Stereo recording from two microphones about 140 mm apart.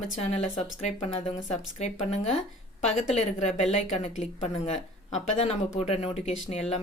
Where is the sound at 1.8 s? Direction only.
50° left (ahead or behind).